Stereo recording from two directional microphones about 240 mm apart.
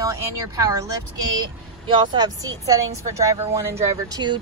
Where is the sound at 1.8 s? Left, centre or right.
Centre.